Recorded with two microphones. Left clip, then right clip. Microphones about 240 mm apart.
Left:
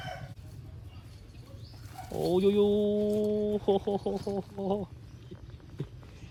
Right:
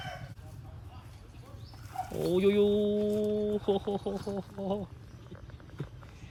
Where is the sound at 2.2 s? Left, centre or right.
Right.